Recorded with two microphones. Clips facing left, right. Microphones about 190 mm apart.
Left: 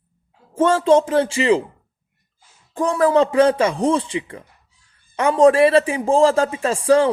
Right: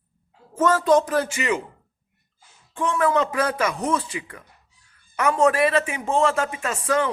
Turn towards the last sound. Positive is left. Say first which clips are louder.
# left 8 dB
turn(degrees=30)  # may be behind; listen again after turning